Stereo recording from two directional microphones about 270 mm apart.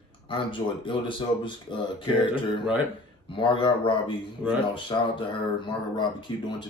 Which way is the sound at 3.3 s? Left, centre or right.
Centre.